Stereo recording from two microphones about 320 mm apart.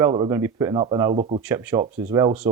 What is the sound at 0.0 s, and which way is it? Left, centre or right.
Speech, centre.